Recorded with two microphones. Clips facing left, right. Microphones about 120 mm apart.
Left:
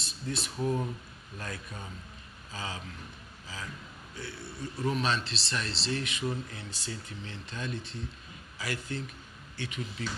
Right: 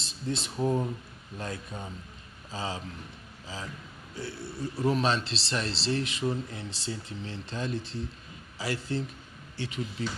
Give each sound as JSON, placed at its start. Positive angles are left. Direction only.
{"t": 0.0, "sound": "speech", "side_deg": -25}
{"t": 4.4, "sound": "speech", "side_deg": 0}
{"t": 4.6, "sound": "speech", "side_deg": -30}